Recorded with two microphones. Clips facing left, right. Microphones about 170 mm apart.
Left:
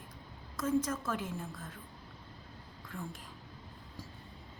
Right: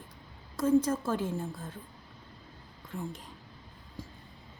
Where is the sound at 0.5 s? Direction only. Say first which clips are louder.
Right 7 dB; 30° right (ahead or behind).